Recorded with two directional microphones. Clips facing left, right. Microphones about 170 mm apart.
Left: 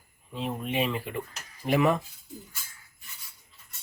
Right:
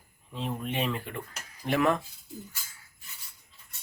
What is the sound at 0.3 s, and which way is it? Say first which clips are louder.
Speech: left 2 dB; centre (ahead or behind).